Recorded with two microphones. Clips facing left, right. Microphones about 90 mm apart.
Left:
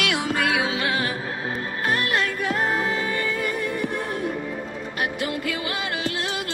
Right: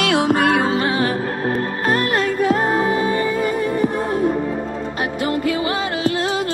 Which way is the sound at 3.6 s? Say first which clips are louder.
Right 7 dB; 45° right (ahead or behind).